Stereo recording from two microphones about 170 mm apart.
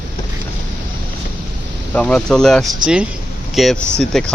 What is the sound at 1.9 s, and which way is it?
Speech, 5° left (ahead or behind).